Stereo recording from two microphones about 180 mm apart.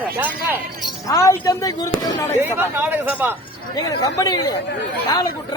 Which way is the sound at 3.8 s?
20° left (ahead or behind).